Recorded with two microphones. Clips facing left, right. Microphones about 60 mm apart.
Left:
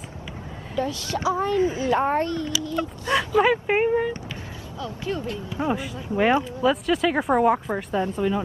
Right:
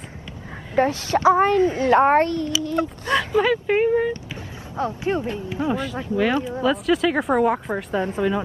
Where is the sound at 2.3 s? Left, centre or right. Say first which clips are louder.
Right 3 dB; right.